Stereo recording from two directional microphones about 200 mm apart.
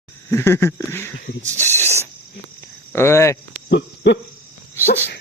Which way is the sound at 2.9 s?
15° left (ahead or behind).